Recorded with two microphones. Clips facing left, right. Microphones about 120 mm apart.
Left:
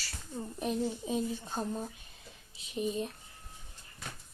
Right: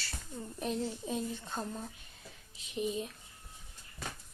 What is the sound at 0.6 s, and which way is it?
Speech, 10° left (ahead or behind).